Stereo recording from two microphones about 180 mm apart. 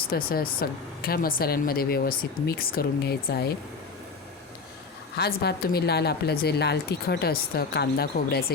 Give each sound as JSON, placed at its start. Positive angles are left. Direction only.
{"t": 0.1, "sound": "speech", "side_deg": 55}
{"t": 5.1, "sound": "speech", "side_deg": 65}